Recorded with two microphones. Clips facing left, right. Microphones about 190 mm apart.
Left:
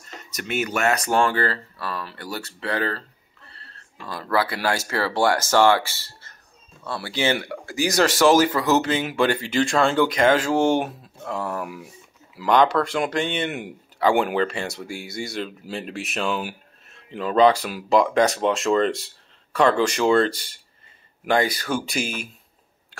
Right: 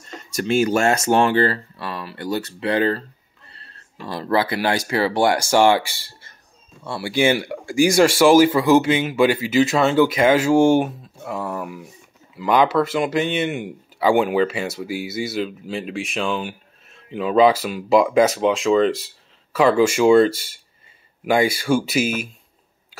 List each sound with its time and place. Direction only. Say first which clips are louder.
0.4 s speech: right 7 dB; 30° right (ahead or behind); by 22.1 s 5° right (ahead or behind)